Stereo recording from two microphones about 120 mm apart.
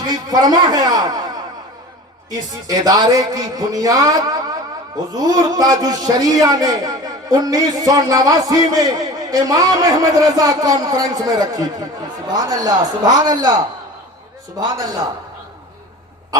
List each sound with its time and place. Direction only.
0.0 s a man's voice: 35° right (ahead or behind)
2.6 s a man's voice: 30° right (ahead or behind)